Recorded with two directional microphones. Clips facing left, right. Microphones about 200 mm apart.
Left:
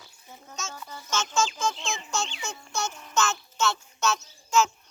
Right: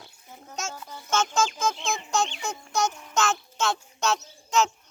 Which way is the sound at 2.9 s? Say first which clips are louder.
Right 1 dB; 15° right (ahead or behind).